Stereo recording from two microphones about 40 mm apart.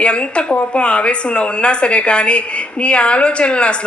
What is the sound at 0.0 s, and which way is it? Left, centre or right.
Speech, left.